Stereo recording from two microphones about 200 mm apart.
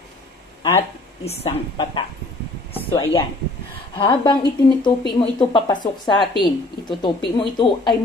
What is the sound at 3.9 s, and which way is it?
A woman's voice, 25° left (ahead or behind).